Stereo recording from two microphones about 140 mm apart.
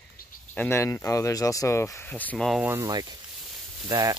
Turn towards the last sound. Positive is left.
turn(degrees=-25)  # may be behind; listen again after turning